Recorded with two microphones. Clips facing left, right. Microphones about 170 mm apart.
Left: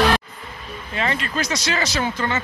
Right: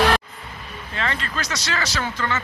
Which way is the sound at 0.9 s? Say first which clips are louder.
Left 3 dB; 15° left (ahead or behind).